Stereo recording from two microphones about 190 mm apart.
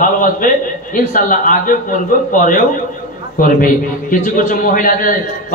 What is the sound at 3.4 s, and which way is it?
A man's voice, 45° left (ahead or behind).